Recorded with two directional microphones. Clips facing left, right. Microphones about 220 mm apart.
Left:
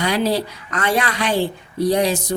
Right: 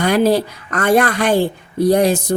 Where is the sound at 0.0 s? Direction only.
50° right (ahead or behind).